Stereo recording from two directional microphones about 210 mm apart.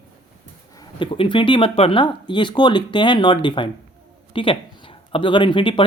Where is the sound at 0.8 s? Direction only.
25° left (ahead or behind).